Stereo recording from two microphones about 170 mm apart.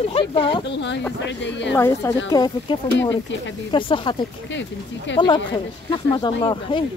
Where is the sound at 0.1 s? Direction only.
30° left (ahead or behind).